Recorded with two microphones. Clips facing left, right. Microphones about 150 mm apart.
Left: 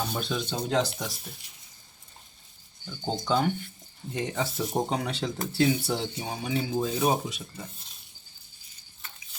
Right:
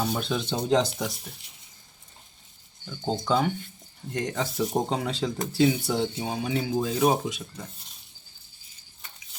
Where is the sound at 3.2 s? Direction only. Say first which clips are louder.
Even; centre (ahead or behind).